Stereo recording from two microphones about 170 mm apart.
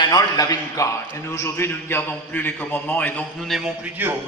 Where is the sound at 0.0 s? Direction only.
25° left (ahead or behind).